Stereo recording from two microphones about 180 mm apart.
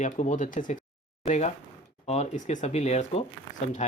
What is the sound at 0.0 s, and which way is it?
Speech, 45° left (ahead or behind).